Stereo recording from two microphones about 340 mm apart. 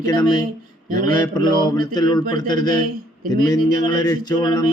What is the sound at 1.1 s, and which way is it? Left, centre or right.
Speech, centre.